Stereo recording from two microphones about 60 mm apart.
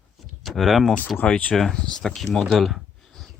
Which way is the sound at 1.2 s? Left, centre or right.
Centre.